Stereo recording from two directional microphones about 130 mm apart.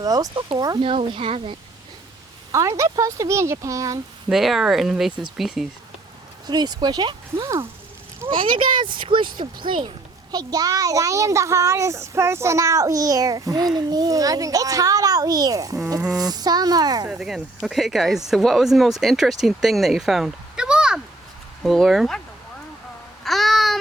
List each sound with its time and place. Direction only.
0.0 s a child's voice: 30° right (ahead or behind)
0.8 s speech: 40° right (ahead or behind)
2.5 s a child's voice: 25° right (ahead or behind)
4.3 s speech: centre (ahead or behind)
6.5 s speech: 30° right (ahead or behind)
8.3 s speech: 40° right (ahead or behind)
10.3 s a child's voice: 30° right (ahead or behind)
17.1 s speech: 5° right (ahead or behind)
23.2 s babbling: centre (ahead or behind)